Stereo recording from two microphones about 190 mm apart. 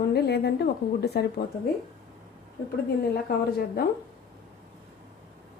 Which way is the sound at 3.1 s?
55° left (ahead or behind).